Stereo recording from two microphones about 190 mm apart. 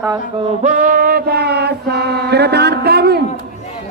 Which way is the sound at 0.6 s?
40° right (ahead or behind).